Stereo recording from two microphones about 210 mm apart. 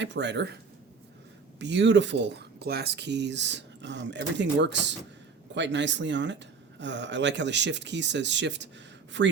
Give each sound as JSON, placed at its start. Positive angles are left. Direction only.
{"t": 0.0, "sound": "speech", "side_deg": -55}
{"t": 1.5, "sound": "speech", "side_deg": -55}